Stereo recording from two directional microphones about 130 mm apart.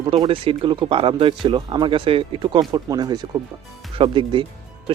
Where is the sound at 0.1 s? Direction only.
45° right (ahead or behind).